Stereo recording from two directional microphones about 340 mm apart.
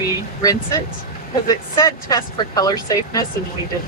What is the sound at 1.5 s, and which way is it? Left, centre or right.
Speech, centre.